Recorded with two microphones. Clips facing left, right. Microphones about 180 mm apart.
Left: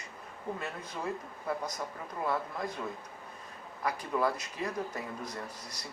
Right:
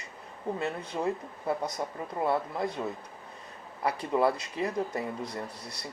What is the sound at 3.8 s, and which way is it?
Speech, 30° right (ahead or behind).